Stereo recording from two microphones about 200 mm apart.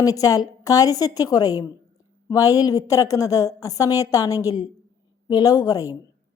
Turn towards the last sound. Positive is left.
turn(degrees=20)  # may be behind; listen again after turning